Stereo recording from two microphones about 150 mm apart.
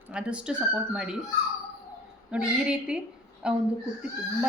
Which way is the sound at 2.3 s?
5° right (ahead or behind).